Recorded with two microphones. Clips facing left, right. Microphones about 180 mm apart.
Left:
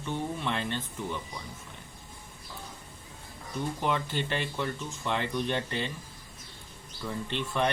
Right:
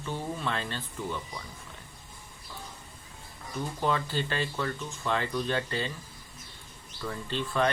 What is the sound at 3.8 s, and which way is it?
Speech, 20° left (ahead or behind).